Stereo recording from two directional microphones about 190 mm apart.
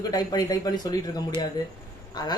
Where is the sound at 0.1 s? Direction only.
20° left (ahead or behind).